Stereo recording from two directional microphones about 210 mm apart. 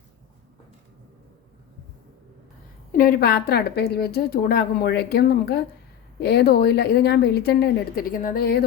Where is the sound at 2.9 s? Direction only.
45° left (ahead or behind).